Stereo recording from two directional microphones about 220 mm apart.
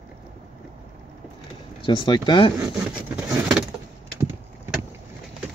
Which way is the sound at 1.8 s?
20° left (ahead or behind).